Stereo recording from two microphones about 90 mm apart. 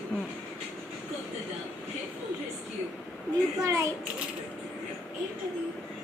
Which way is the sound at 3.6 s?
35° right (ahead or behind).